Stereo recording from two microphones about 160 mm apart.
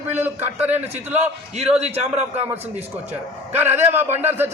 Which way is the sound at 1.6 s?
40° right (ahead or behind).